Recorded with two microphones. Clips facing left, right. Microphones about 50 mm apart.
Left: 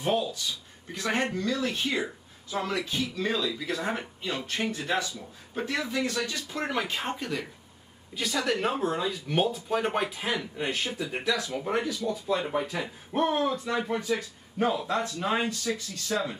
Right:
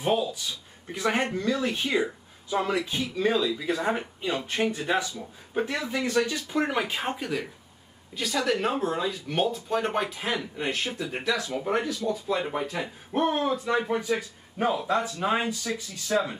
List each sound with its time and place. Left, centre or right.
0.0 s a man's voice: centre